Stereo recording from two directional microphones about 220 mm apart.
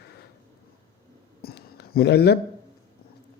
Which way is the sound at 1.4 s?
45° left (ahead or behind).